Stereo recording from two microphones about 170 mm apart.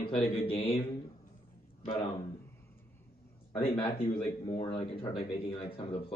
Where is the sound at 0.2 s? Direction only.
35° left (ahead or behind).